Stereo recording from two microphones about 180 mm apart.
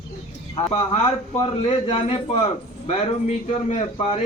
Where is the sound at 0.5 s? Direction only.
35° left (ahead or behind).